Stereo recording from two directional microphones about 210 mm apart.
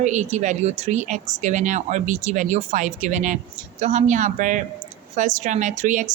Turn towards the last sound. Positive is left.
turn(degrees=-35)  # may be behind; listen again after turning